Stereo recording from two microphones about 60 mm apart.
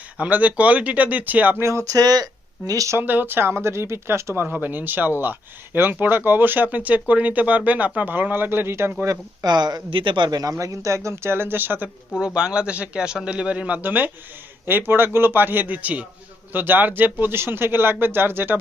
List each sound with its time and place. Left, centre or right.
0.2 s speech: right
1.6 s speech: right
1.9 s speech: right
3.0 s speech: right
4.5 s speech: right
9.0 s speech: right
10.6 s speech: right
12.2 s a man's voice: centre; by 18.6 s right